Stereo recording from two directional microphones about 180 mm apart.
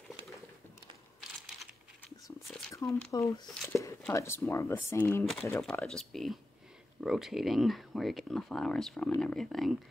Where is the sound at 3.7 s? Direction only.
15° left (ahead or behind).